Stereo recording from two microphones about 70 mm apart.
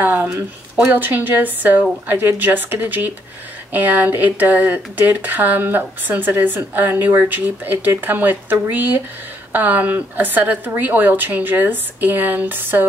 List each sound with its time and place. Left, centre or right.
0.0 s speech: right